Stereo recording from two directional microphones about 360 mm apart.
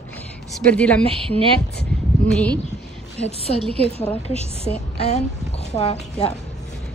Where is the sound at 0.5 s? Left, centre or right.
Centre.